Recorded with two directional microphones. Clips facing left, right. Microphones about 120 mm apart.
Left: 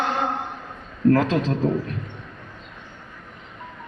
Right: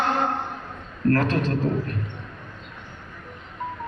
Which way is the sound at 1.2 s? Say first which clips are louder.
Left 2 dB; 90° left.